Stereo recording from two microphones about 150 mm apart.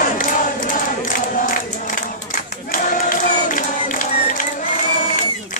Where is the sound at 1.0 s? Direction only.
65° left (ahead or behind).